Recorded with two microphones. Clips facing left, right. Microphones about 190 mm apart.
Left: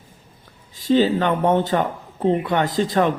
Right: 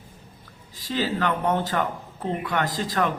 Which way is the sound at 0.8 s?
25° left (ahead or behind).